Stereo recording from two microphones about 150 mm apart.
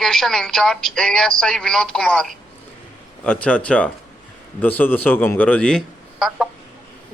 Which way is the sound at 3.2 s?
10° left (ahead or behind).